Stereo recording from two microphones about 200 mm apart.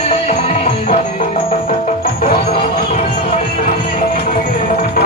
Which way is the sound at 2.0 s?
50° left (ahead or behind).